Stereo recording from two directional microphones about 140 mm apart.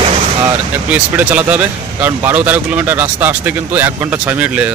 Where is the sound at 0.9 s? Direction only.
10° right (ahead or behind).